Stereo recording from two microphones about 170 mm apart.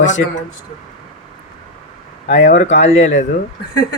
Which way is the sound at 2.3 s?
90° left.